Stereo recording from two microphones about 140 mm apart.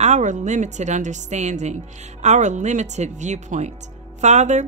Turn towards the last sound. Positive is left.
turn(degrees=-55)  # may be behind; listen again after turning